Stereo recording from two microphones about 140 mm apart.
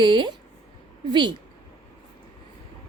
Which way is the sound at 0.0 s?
35° right (ahead or behind).